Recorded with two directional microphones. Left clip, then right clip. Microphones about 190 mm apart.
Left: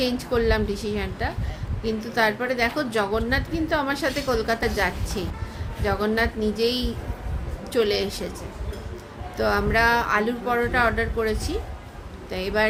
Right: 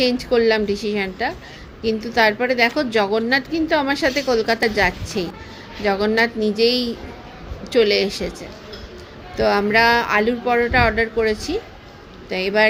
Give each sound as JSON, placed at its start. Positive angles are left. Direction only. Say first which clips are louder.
{"t": 0.0, "sound": "a woman's voice", "louder": "right 6 dB", "side_deg": -30}
{"t": 9.3, "sound": "a woman's voice", "louder": "right 6 dB", "side_deg": -35}